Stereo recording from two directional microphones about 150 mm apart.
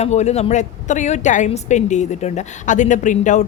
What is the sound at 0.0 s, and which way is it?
A woman's voice, 45° left (ahead or behind).